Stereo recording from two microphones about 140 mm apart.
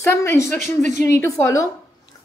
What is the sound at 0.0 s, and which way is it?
A woman's voice, 20° left (ahead or behind).